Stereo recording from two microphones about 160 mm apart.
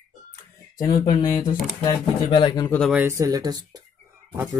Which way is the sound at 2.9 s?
10° right (ahead or behind).